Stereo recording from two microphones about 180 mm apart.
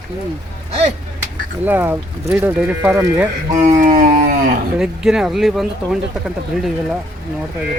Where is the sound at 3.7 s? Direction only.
45° right (ahead or behind).